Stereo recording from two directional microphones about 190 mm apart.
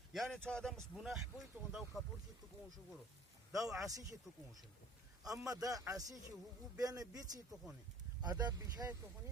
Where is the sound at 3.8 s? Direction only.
20° right (ahead or behind).